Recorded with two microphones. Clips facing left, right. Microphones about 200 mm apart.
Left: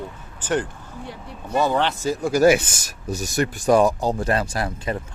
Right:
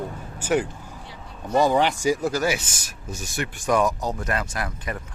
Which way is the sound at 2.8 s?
40° left (ahead or behind).